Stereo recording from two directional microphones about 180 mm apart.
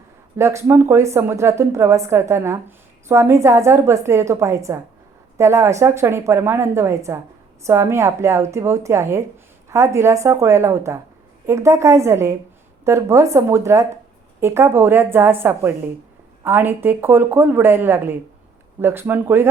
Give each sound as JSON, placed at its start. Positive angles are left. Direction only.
{"t": 0.3, "sound": "a woman's voice", "side_deg": -15}